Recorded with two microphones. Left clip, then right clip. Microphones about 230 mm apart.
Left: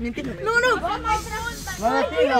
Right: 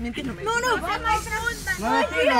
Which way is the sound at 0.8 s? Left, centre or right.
Right.